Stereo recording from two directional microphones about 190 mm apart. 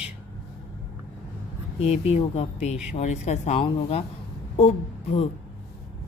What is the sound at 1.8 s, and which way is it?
Speech, 30° left (ahead or behind).